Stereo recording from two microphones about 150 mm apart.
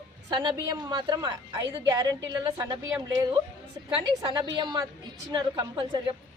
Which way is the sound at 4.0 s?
35° right (ahead or behind).